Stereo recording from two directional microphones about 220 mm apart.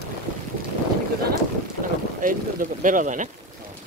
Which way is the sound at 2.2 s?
35° right (ahead or behind).